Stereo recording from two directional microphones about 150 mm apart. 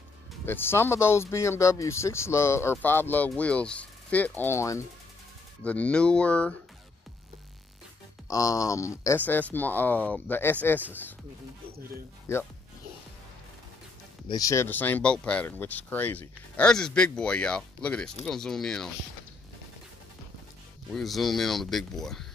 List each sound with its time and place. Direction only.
0.5 s speech: 15° left (ahead or behind)
5.6 s speech: 10° left (ahead or behind)
8.3 s speech: 20° left (ahead or behind)
14.2 s speech: 25° left (ahead or behind); by 18.9 s 5° left (ahead or behind)
20.9 s speech: centre (ahead or behind)